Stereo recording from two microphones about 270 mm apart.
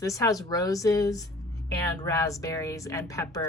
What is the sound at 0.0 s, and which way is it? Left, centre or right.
Speech, centre.